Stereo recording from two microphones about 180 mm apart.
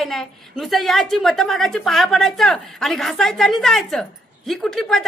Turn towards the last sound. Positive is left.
turn(degrees=0)  # may be behind; listen again after turning